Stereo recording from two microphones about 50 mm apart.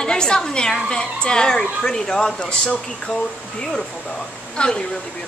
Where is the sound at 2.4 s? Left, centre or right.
Left.